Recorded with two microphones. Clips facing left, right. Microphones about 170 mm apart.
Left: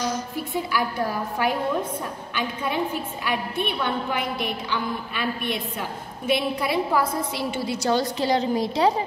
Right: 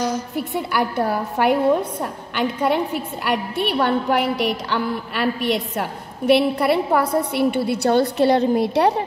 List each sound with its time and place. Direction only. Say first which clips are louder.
0.4 s a woman's voice: right 4 dB; 65° right (ahead or behind)